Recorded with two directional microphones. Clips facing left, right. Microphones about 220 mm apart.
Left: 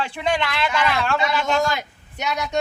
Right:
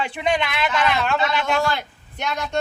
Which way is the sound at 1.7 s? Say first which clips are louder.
Right 1 dB; 10° left (ahead or behind).